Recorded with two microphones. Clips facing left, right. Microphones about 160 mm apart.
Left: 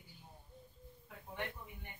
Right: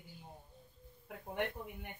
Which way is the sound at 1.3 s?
60° right (ahead or behind).